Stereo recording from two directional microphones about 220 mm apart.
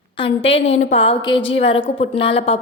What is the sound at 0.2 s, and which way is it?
A woman's voice, 25° left (ahead or behind).